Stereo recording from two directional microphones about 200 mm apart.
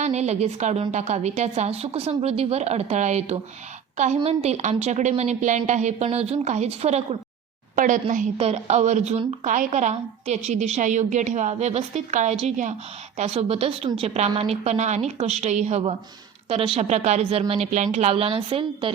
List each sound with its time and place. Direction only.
0.0 s a woman's voice: 35° right (ahead or behind)